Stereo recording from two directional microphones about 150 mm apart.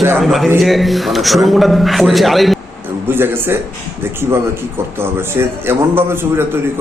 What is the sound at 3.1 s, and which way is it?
A man's voice, 15° right (ahead or behind).